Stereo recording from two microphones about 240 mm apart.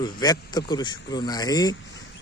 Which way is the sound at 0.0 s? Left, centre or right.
Centre.